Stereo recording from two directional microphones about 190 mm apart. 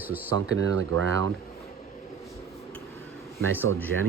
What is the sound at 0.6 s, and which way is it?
Speech, 90° right.